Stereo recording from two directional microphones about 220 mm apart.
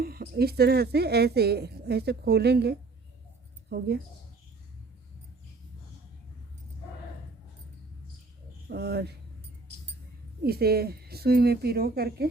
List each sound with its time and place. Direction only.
0.0 s speech: 45° right (ahead or behind)
8.7 s speech: 50° right (ahead or behind)
10.4 s speech: 45° right (ahead or behind)